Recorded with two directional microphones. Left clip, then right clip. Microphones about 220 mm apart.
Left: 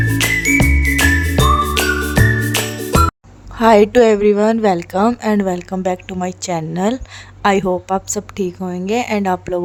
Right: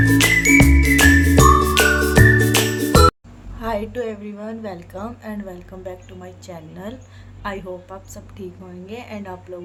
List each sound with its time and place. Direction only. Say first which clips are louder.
0.2 s music: even; centre (ahead or behind)
3.6 s a woman's voice: left 15 dB; 50° left (ahead or behind)